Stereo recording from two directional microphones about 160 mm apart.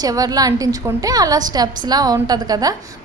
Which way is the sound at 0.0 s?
25° right (ahead or behind).